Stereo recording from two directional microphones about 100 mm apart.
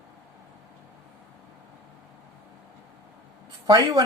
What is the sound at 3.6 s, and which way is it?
Speech, 40° right (ahead or behind).